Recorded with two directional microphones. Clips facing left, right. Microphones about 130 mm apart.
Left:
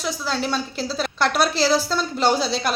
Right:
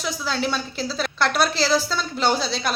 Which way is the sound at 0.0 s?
Centre (ahead or behind).